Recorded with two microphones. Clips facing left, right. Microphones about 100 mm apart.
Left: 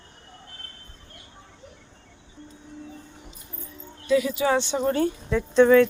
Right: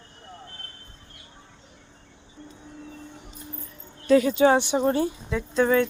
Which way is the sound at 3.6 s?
45° right (ahead or behind).